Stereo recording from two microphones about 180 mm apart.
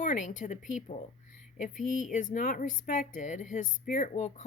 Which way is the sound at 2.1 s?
45° left (ahead or behind).